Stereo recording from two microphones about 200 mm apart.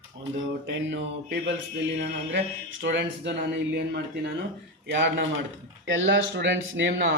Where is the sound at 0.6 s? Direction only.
60° right (ahead or behind).